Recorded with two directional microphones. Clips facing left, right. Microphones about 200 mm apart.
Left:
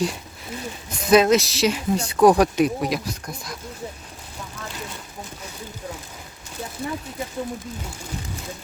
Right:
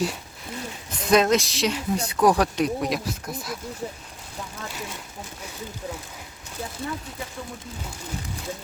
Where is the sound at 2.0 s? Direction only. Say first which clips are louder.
Left 5 dB; 30° left (ahead or behind).